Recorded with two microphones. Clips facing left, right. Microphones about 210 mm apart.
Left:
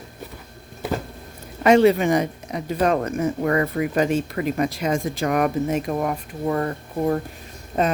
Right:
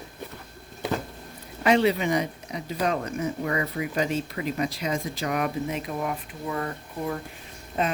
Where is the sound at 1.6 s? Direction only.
45° left (ahead or behind).